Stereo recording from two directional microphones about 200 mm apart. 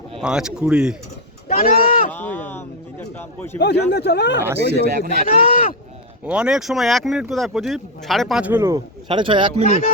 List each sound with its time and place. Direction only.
0.2 s speech: 5° right (ahead or behind)
1.5 s a sound: 45° left (ahead or behind)
2.1 s a man's voice: 10° left (ahead or behind)
3.6 s speech: 55° left (ahead or behind)
4.8 s speech: 50° right (ahead or behind)
5.3 s speech: 45° left (ahead or behind)
6.2 s speech: 5° right (ahead or behind); by 9.6 s 25° right (ahead or behind)
9.6 s speech: 35° left (ahead or behind)